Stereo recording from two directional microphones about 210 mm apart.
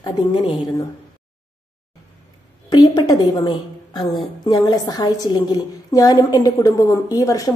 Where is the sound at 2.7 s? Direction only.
20° left (ahead or behind).